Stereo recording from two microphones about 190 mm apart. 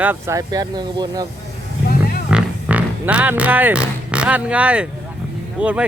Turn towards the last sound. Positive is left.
turn(degrees=-5)  # may be behind; listen again after turning